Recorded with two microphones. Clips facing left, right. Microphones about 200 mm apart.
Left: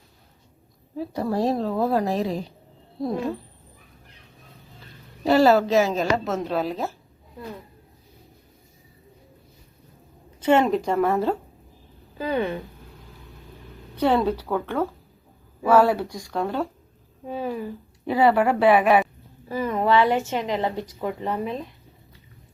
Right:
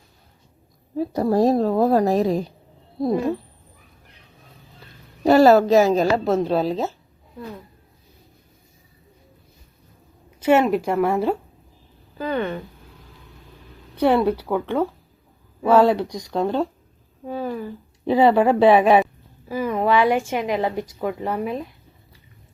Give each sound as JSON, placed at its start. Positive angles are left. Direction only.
{"t": 0.9, "sound": "a woman's voice", "side_deg": -40}
{"t": 5.2, "sound": "a woman's voice", "side_deg": -45}
{"t": 10.4, "sound": "a woman's voice", "side_deg": -10}
{"t": 12.1, "sound": "speech", "side_deg": 10}
{"t": 14.0, "sound": "a woman's voice", "side_deg": -10}
{"t": 17.2, "sound": "speech", "side_deg": 5}
{"t": 18.0, "sound": "speech", "side_deg": -25}
{"t": 19.5, "sound": "a woman's voice", "side_deg": -10}